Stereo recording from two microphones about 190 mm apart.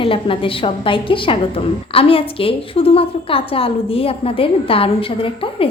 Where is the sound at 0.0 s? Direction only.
30° left (ahead or behind).